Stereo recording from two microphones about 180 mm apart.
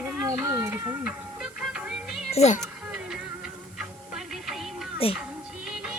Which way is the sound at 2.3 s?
40° left (ahead or behind).